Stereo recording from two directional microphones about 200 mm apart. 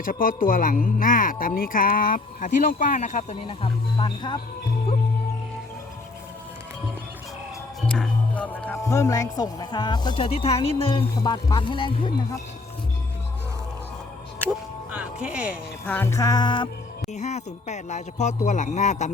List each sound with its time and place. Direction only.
0.0 s a woman's voice: 45° left (ahead or behind); by 4.4 s 25° left (ahead or behind)
7.9 s speech: 5° left (ahead or behind); by 12.1 s 25° left (ahead or behind)
14.9 s speech: 5° right (ahead or behind)
15.9 s music: 10° left (ahead or behind)
17.1 s speech: 35° left (ahead or behind)